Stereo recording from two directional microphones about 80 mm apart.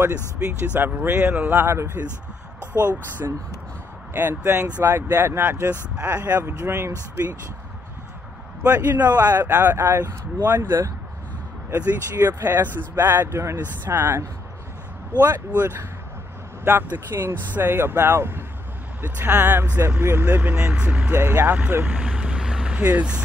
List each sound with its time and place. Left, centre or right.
0.7 s speech: right
1.5 s speech: right
8.6 s speech: right
11.7 s speech: right; by 21.1 s centre
21.1 s speech: right